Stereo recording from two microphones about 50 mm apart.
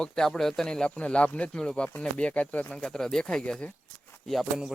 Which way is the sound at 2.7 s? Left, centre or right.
Centre.